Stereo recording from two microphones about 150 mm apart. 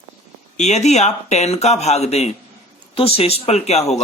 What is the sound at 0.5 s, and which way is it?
Speech, 50° left (ahead or behind).